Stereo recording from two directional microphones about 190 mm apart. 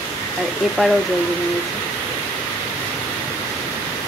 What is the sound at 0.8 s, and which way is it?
Speech, centre (ahead or behind).